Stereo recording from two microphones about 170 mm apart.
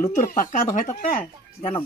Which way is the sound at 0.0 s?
50° left (ahead or behind).